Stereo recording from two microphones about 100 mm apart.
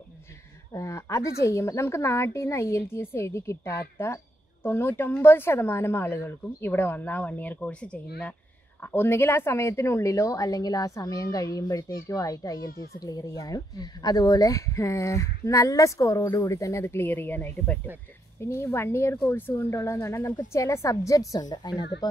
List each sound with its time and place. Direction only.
0.7 s a woman's voice: 30° left (ahead or behind)